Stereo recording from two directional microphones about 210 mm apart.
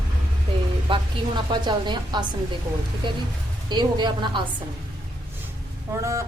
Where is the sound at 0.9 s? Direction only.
20° right (ahead or behind).